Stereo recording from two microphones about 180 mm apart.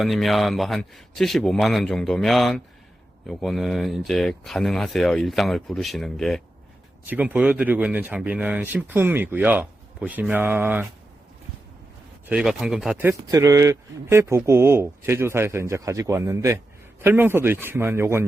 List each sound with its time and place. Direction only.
0.0 s speech: centre (ahead or behind)
7.1 s speech: 10° right (ahead or behind)
12.3 s speech: 5° right (ahead or behind)